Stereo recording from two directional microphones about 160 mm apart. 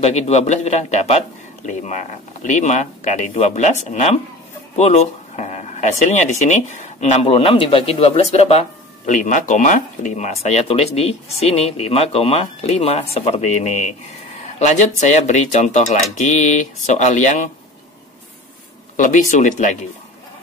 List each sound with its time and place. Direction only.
0.0 s speech: 45° left (ahead or behind)
18.9 s speech: 55° left (ahead or behind)